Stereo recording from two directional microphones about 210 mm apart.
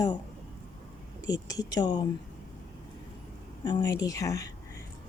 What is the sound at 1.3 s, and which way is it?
Speech, 15° left (ahead or behind).